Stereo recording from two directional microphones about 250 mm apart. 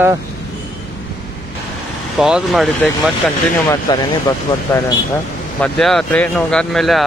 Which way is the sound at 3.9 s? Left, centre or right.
Centre.